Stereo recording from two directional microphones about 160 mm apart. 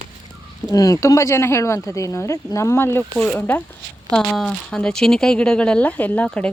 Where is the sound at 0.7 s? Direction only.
20° left (ahead or behind).